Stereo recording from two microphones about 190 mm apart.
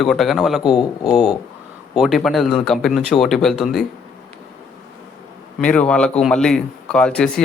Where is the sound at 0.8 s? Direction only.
20° left (ahead or behind).